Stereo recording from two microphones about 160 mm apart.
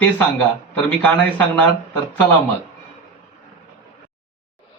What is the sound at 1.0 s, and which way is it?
Speech, 10° left (ahead or behind).